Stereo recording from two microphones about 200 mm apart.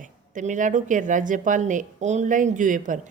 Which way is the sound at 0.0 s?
40° right (ahead or behind).